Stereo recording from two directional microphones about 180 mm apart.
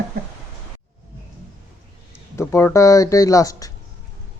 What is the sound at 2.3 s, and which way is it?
Speech, 15° left (ahead or behind).